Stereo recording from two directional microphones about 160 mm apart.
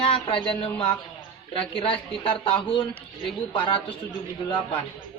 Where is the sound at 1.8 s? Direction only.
35° left (ahead or behind).